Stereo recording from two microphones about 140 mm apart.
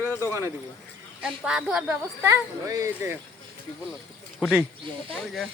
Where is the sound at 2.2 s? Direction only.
25° right (ahead or behind).